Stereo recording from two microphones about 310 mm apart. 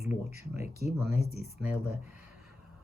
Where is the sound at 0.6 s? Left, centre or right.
Left.